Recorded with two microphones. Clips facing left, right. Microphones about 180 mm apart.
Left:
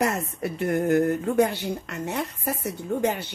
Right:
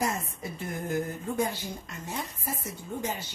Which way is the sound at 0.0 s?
65° left (ahead or behind).